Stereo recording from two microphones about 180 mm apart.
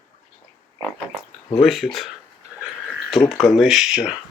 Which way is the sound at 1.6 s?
Centre (ahead or behind).